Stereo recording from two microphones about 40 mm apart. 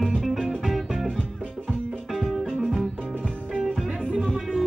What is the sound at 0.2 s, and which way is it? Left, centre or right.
Music, centre.